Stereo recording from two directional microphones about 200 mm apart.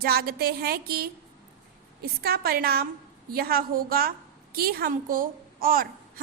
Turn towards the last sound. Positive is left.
turn(degrees=-45)  # may be behind; listen again after turning